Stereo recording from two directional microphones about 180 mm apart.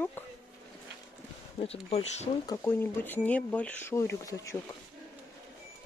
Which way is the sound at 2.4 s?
10° left (ahead or behind).